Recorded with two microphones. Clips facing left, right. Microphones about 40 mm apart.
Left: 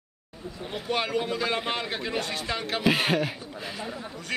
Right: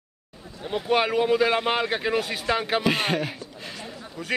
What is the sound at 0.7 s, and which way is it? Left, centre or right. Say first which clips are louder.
Speech: right 6 dB; centre.